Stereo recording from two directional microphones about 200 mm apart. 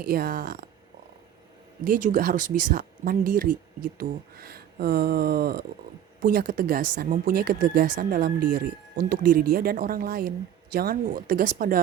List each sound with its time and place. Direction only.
0.0 s speech: 50° right (ahead or behind)
1.8 s speech: 40° right (ahead or behind)